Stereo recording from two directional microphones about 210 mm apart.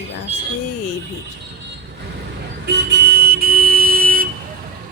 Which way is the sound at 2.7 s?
50° right (ahead or behind).